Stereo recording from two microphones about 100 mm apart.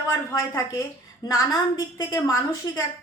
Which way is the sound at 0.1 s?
30° left (ahead or behind).